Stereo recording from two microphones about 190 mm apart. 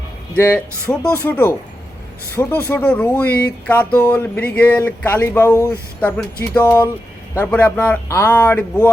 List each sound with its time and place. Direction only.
0.3 s speech: 10° left (ahead or behind)